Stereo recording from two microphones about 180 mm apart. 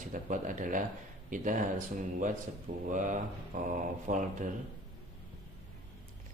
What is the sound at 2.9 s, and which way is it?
A man's voice, 45° right (ahead or behind).